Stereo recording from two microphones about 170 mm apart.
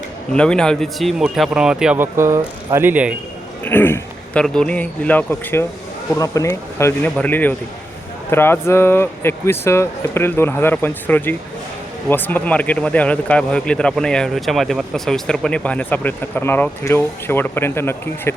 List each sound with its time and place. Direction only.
0.3 s speech: 5° left (ahead or behind)
3.6 s a man's voice: 10° left (ahead or behind)